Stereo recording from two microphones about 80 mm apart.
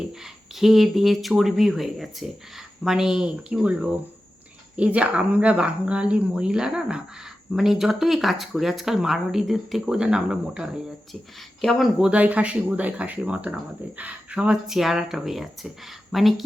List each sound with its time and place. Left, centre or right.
0.5 s speech: centre
11.6 s speech: centre
11.9 s speech: centre